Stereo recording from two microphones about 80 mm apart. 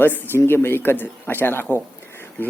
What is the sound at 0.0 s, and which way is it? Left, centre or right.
Speech, left.